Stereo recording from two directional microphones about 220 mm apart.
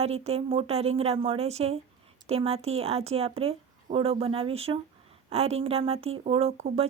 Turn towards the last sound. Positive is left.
turn(degrees=-30)  # may be behind; listen again after turning